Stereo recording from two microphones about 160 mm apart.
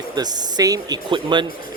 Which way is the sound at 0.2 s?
25° right (ahead or behind).